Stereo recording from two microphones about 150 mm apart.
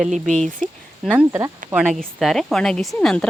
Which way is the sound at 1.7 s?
Centre (ahead or behind).